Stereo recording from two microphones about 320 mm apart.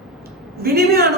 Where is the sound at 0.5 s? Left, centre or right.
Right.